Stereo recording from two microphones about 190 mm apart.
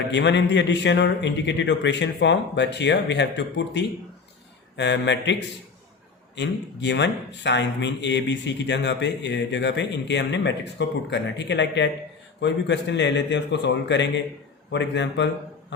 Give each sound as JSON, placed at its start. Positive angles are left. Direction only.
{"t": 0.1, "sound": "speech", "side_deg": 65}